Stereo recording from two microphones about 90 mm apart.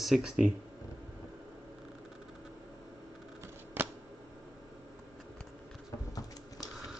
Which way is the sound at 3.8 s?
25° right (ahead or behind).